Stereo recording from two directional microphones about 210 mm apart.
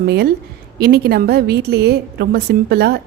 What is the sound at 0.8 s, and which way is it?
A woman's voice, 50° right (ahead or behind).